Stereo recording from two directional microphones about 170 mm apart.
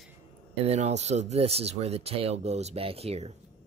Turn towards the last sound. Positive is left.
turn(degrees=-35)  # may be behind; listen again after turning